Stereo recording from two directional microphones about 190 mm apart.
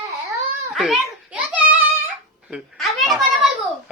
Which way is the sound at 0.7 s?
Centre (ahead or behind).